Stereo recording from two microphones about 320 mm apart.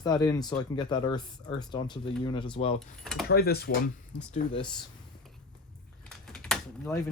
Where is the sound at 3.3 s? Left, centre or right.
Left.